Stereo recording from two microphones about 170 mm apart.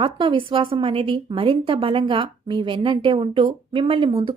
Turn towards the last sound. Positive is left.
turn(degrees=-30)  # may be behind; listen again after turning